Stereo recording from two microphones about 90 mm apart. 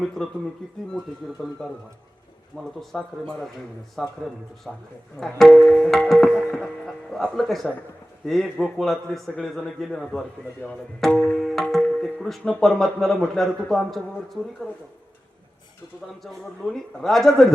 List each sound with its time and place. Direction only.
0.0 s speech: 5° left (ahead or behind)
11.3 s music: centre (ahead or behind)
12.5 s speech: 5° left (ahead or behind)
16.2 s speech: 5° left (ahead or behind)